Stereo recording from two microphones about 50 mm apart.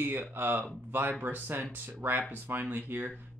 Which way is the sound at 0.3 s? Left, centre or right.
Right.